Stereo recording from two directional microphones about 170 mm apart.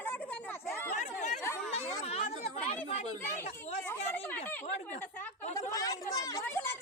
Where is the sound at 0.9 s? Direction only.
45° left (ahead or behind).